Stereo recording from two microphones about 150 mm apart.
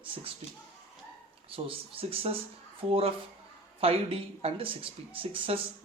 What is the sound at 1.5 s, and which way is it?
Speech, 40° right (ahead or behind).